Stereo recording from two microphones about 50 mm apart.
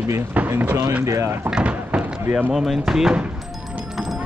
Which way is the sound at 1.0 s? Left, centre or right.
Right.